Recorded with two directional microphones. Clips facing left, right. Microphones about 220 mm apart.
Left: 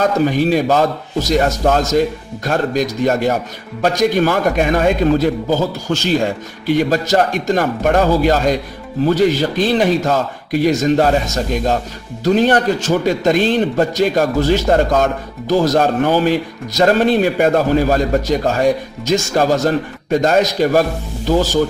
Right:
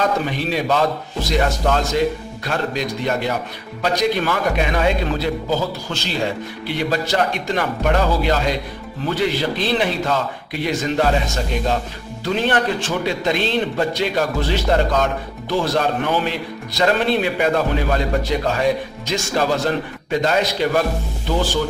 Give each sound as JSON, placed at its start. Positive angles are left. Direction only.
{"t": 0.0, "sound": "a man's voice", "side_deg": 45}
{"t": 12.2, "sound": "a man's voice", "side_deg": 40}